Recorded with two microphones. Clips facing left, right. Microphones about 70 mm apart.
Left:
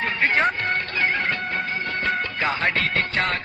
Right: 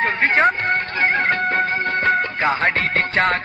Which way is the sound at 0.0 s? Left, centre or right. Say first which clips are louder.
Right 4 dB; right.